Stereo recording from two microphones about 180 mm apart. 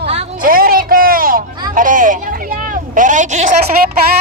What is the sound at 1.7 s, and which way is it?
Speech, 45° right (ahead or behind).